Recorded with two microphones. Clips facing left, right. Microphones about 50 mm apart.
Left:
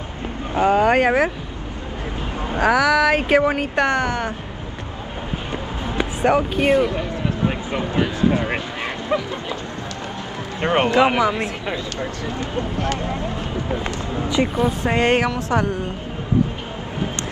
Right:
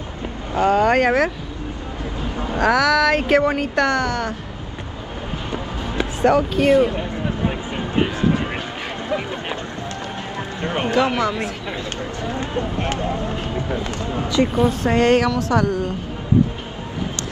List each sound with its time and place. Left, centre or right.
0.6 s speech: centre
2.6 s speech: centre
3.7 s a woman's voice: left
5.9 s speech: centre
7.9 s a sound: right
9.1 s speech: left
10.6 s speech: left
11.0 s speech: centre
12.3 s speech: right
14.4 s a woman's voice: centre